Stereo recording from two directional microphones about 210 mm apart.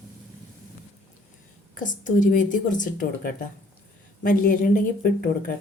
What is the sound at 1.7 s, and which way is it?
A woman's voice, 40° left (ahead or behind).